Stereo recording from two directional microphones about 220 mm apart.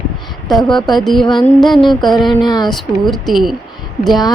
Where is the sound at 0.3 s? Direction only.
Centre (ahead or behind).